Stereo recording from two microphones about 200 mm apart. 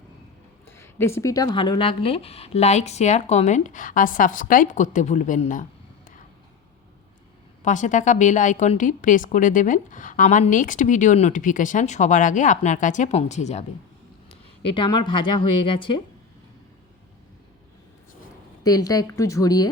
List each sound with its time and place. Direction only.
0.8 s a sound: 10° left (ahead or behind)
1.2 s a woman's voice: 15° left (ahead or behind); by 5.6 s 40° left (ahead or behind)
7.6 s a woman's voice: 40° left (ahead or behind)
18.6 s a woman's voice: 20° left (ahead or behind)